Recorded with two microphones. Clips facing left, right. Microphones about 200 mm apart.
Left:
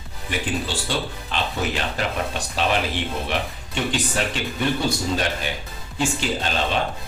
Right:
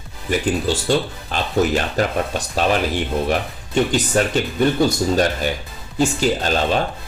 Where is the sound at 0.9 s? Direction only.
45° right (ahead or behind).